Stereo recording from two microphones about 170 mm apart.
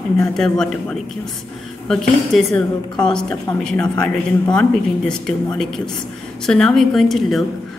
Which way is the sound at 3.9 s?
25° left (ahead or behind).